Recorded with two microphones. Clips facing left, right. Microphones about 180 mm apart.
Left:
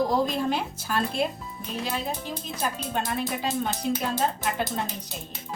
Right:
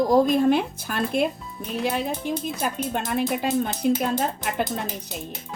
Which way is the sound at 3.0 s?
55° right (ahead or behind).